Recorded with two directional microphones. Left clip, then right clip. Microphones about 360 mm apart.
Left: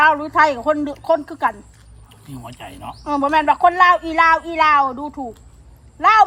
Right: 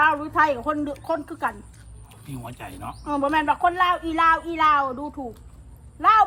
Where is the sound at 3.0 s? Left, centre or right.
Left.